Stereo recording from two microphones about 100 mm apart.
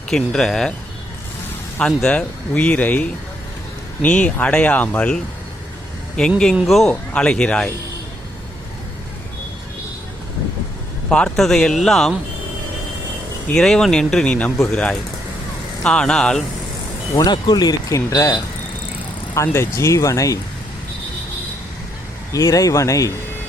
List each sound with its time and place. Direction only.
0.1 s speech: 5° left (ahead or behind)
1.8 s speech: 5° left (ahead or behind)
11.1 s speech: 5° left (ahead or behind)
13.5 s speech: 5° left (ahead or behind)
17.2 s speech: 45° left (ahead or behind)
22.3 s speech: 35° left (ahead or behind)